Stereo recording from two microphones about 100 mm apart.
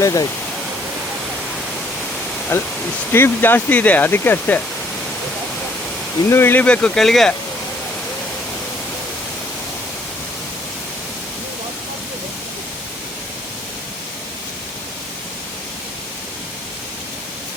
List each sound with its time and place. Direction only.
0.0 s speech: 35° left (ahead or behind)
2.5 s speech: 25° left (ahead or behind)
6.2 s speech: 25° left (ahead or behind); by 7.3 s 5° left (ahead or behind)